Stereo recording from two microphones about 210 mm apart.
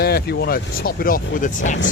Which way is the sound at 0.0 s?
50° left (ahead or behind).